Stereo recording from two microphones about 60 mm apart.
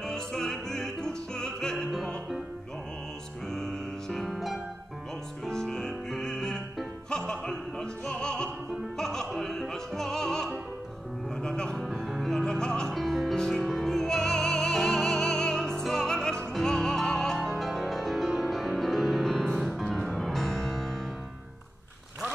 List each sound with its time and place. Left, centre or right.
0.0 s opera: centre
3.5 s music: centre
11.8 s music: centre